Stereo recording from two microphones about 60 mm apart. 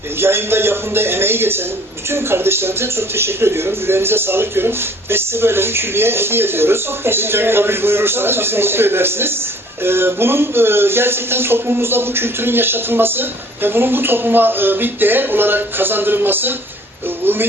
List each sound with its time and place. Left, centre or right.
0.2 s speech: right